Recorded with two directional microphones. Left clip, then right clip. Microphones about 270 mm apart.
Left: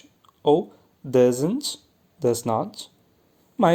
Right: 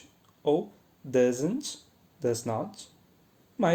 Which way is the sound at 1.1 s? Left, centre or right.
Left.